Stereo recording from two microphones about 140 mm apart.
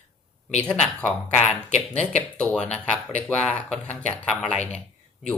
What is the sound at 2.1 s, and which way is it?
Speech, 10° left (ahead or behind).